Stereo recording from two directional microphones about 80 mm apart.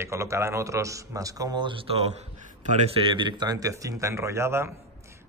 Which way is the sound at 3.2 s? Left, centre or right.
Right.